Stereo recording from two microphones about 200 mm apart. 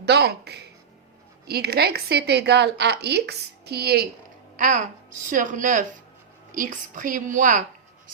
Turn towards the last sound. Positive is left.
turn(degrees=-40)  # may be behind; listen again after turning